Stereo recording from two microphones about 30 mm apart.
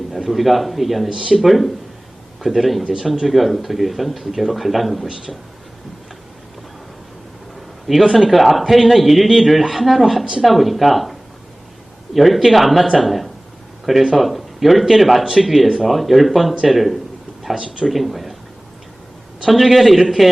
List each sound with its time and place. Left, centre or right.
0.3 s speech: centre
1.1 s speech: centre
1.4 s speech: centre
7.9 s speech: centre
17.5 s speech: right
17.8 s speech: centre
19.5 s speech: centre